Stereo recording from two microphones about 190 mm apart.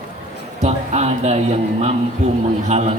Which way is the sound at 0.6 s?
35° right (ahead or behind).